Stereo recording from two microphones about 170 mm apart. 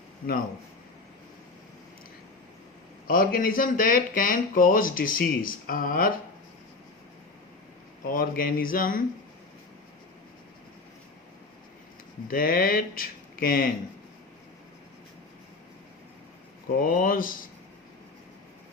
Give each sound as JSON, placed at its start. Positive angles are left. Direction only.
{"t": 3.1, "sound": "speech", "side_deg": 55}
{"t": 8.0, "sound": "speech", "side_deg": 55}
{"t": 12.3, "sound": "speech", "side_deg": 55}
{"t": 16.7, "sound": "speech", "side_deg": 55}